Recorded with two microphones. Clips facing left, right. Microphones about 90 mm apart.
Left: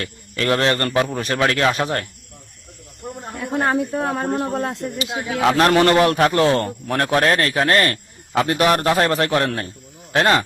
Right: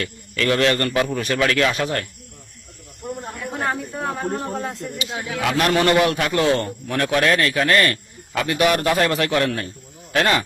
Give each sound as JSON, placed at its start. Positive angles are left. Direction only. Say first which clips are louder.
{"t": 0.0, "sound": "a man's voice", "louder": "even", "side_deg": 30}
{"t": 3.3, "sound": "a woman's voice", "louder": "left 7 dB", "side_deg": 65}
{"t": 5.2, "sound": "a man's voice", "louder": "left 5 dB", "side_deg": 35}